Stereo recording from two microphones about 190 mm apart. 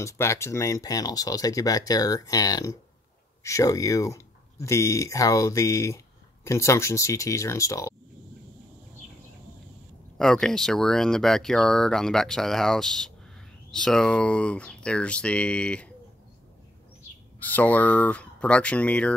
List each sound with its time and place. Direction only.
0.0 s speech: 15° left (ahead or behind)
10.1 s speech: 5° left (ahead or behind)
17.4 s speech: 10° left (ahead or behind)